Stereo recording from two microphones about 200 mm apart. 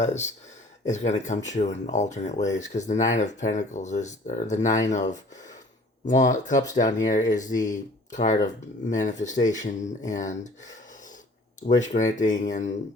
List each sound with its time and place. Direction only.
0.0 s speech: 35° left (ahead or behind)
6.1 s speech: 40° left (ahead or behind)
11.7 s speech: 35° left (ahead or behind)